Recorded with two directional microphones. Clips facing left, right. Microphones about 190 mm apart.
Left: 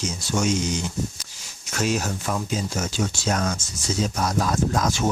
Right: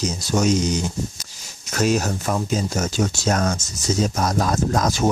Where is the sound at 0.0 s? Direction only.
40° right (ahead or behind).